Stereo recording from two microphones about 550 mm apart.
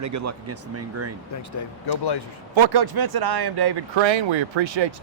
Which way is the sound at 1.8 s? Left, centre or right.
Left.